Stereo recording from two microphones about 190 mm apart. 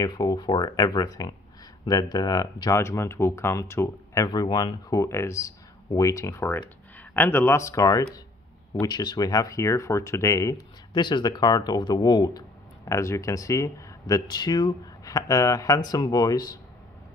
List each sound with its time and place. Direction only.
0.0 s speech: 20° left (ahead or behind)